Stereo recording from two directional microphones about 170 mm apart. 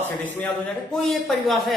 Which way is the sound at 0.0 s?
10° left (ahead or behind).